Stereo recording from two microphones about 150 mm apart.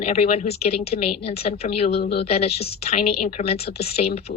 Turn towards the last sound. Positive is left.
turn(degrees=60)  # may be behind; listen again after turning